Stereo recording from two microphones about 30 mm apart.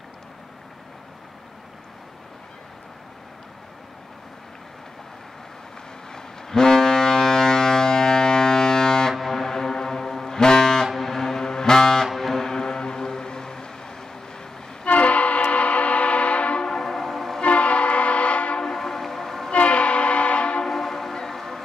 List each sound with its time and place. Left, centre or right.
6.1 s ship: centre
9.2 s music: centre
11.0 s vehicle: centre
12.1 s music: centre
12.4 s music: left
14.9 s train: left
15.5 s a sound: left
16.6 s train: centre
17.4 s train: left
18.6 s train: centre
19.5 s train horn: left
20.6 s train: centre